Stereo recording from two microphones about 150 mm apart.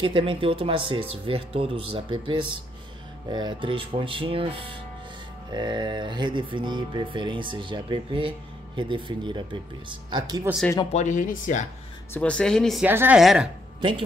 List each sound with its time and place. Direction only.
0.0 s speech: 35° right (ahead or behind)
10.9 s speech: 50° left (ahead or behind)
12.1 s speech: 5° left (ahead or behind)
12.8 s a woman's voice: 15° right (ahead or behind)
13.2 s speech: centre (ahead or behind)
13.7 s speech: 30° right (ahead or behind)